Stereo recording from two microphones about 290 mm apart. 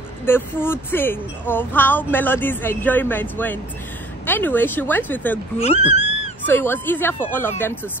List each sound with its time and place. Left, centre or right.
0.2 s speech: centre
5.6 s a sound: left
6.4 s speech: centre